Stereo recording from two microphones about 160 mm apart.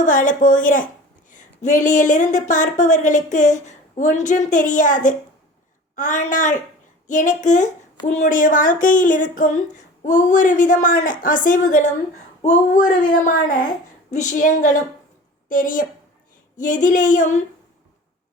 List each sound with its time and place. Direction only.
0.0 s speech: 55° left (ahead or behind)